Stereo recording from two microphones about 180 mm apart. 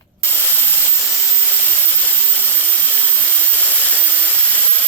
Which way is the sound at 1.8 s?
10° left (ahead or behind).